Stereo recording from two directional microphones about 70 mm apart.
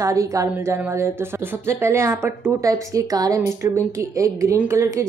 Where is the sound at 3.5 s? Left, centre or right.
Right.